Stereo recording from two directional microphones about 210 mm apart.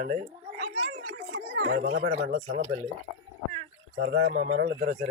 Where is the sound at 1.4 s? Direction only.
45° right (ahead or behind).